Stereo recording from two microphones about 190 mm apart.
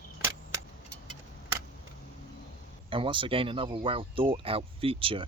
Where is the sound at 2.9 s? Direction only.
25° right (ahead or behind).